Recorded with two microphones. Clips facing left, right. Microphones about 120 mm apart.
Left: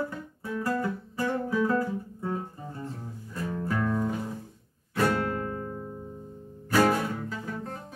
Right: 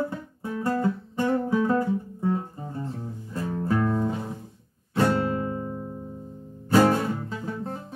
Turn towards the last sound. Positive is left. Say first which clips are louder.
# right 3 dB
turn(degrees=-30)  # may be behind; listen again after turning